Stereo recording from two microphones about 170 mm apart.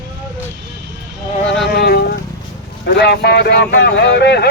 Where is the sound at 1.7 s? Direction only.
70° left (ahead or behind).